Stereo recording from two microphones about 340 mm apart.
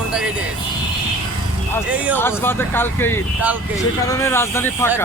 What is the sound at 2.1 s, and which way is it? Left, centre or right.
Speech, centre.